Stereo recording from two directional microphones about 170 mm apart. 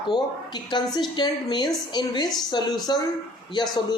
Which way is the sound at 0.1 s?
25° left (ahead or behind).